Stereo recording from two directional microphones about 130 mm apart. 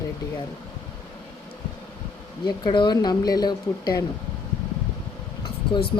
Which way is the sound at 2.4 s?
35° left (ahead or behind).